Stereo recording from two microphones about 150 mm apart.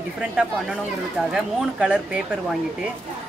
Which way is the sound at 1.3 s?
5° right (ahead or behind).